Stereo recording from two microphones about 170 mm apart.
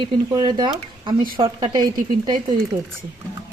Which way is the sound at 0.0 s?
25° right (ahead or behind).